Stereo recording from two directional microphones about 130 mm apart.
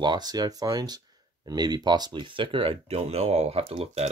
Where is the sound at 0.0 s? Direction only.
30° right (ahead or behind).